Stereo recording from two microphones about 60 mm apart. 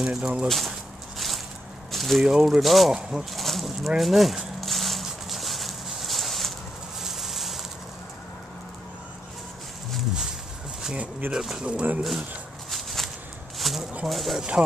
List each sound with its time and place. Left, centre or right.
0.0 s speech: centre
0.5 s a sound: centre
2.2 s speech: centre
2.6 s speech: centre
3.3 s speech: centre
3.9 s a sound: centre
11.0 s speech: right
11.3 s speech: centre
12.7 s a sound: centre
14.0 s speech: centre